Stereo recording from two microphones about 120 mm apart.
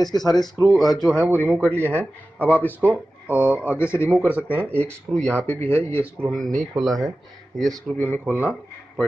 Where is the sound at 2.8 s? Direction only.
15° right (ahead or behind).